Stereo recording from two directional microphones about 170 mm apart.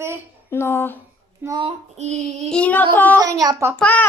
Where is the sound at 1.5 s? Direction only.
30° right (ahead or behind).